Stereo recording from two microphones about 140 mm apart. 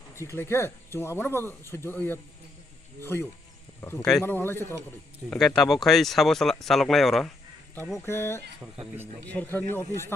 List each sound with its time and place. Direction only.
0.1 s speech: 20° left (ahead or behind)
5.4 s speech: centre (ahead or behind)
8.0 s speech: 20° left (ahead or behind)